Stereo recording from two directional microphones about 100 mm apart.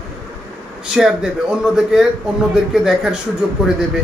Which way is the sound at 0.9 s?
5° right (ahead or behind).